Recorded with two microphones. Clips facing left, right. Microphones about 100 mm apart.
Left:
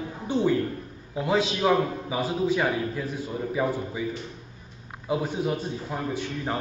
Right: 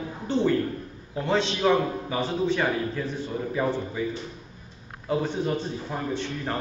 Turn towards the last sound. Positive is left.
turn(degrees=10)  # may be behind; listen again after turning